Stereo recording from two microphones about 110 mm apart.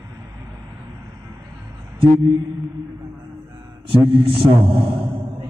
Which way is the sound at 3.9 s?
55° right (ahead or behind).